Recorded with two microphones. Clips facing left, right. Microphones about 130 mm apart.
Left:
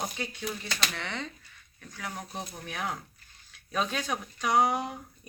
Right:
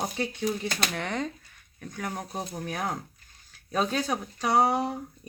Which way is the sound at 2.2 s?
40° right (ahead or behind).